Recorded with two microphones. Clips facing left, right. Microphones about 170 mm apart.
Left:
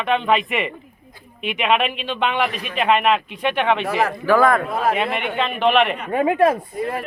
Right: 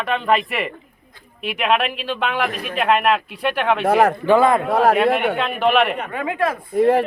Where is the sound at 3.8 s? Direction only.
55° right (ahead or behind).